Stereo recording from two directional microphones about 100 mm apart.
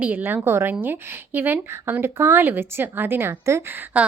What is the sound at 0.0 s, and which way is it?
A woman's voice, 20° right (ahead or behind).